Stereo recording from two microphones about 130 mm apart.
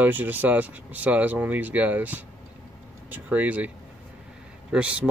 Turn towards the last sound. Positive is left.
turn(degrees=-10)  # may be behind; listen again after turning